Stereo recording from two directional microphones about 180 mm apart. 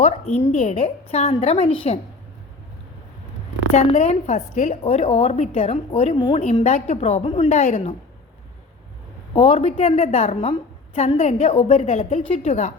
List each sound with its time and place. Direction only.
0.3 s a woman's voice: 40° left (ahead or behind)
3.8 s a woman's voice: 40° left (ahead or behind)
9.3 s a woman's voice: 35° left (ahead or behind)